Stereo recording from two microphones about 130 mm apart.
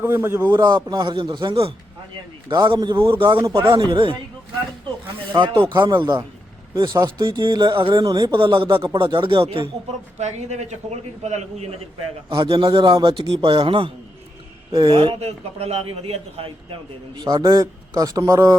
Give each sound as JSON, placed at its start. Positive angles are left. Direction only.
{"t": 0.0, "sound": "speech", "side_deg": -20}
{"t": 0.5, "sound": "speech", "side_deg": -35}
{"t": 3.3, "sound": "speech", "side_deg": -20}
{"t": 3.8, "sound": "speech", "side_deg": -40}
{"t": 5.4, "sound": "speech", "side_deg": -35}
{"t": 10.2, "sound": "a man's voice", "side_deg": -60}
{"t": 12.4, "sound": "a man's voice", "side_deg": -40}
{"t": 17.2, "sound": "speech", "side_deg": -30}